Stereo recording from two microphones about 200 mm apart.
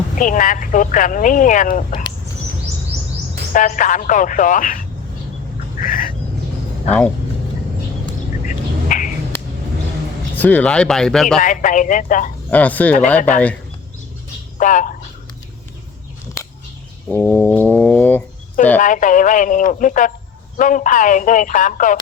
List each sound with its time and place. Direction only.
0.2 s speech: 40° left (ahead or behind)
3.5 s speech: 40° left (ahead or behind)
5.8 s bird: 45° left (ahead or behind)
8.4 s bird: 40° left (ahead or behind)
10.3 s speech: 10° left (ahead or behind)
11.3 s speech: 40° left (ahead or behind)
12.5 s speech: 10° left (ahead or behind)
14.6 s speech: 40° left (ahead or behind)
17.1 s brass instrument: 10° left (ahead or behind)
18.8 s speech: 40° left (ahead or behind)